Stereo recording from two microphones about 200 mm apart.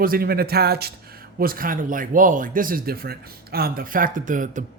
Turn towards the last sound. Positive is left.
turn(degrees=-40)  # may be behind; listen again after turning